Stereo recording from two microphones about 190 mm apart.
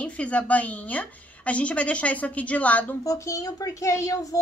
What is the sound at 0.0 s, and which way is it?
Speech, 5° left (ahead or behind).